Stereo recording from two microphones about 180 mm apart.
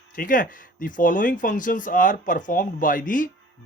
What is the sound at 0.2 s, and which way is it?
Speech, 50° left (ahead or behind).